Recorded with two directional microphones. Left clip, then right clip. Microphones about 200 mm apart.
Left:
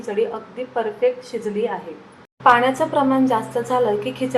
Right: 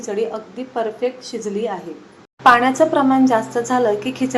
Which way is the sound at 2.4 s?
25° right (ahead or behind).